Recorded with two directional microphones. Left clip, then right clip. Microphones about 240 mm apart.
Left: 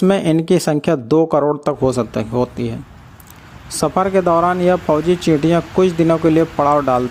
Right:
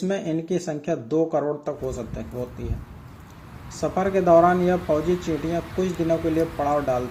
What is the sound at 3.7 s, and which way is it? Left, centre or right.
Speech, left.